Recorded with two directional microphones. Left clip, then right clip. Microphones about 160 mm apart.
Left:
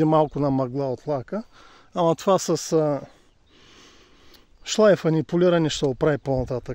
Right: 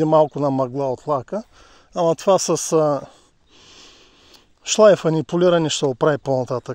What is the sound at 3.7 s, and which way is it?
Sniff, 20° left (ahead or behind).